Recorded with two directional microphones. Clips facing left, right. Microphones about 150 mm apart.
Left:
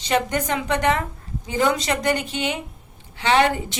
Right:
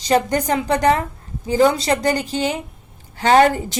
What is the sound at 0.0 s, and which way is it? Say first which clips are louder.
Speech: right 4 dB; 35° right (ahead or behind).